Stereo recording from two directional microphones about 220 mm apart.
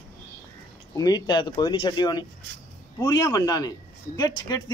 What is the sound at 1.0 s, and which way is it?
Speech, 15° left (ahead or behind).